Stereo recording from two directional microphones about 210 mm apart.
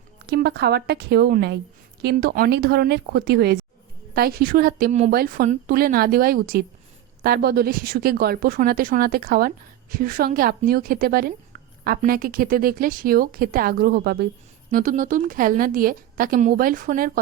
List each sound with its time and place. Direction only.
0.3 s a woman's voice: 50° right (ahead or behind); by 5.1 s 30° right (ahead or behind)
5.1 s a woman's voice: 45° right (ahead or behind)